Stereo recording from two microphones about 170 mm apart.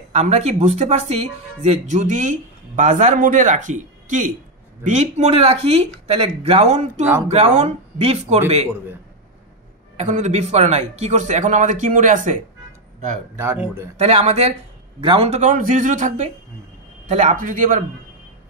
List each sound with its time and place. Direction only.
0.1 s speech: 40° right (ahead or behind)
9.9 s speech: 45° right (ahead or behind)
13.4 s speech: 15° right (ahead or behind)
13.9 s speech: 40° right (ahead or behind)